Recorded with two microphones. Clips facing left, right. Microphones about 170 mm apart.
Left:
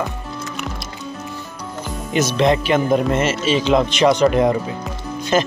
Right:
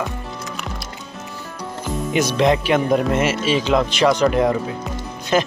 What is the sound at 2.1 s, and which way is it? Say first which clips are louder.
Speech: left 1 dB; 15° right (ahead or behind).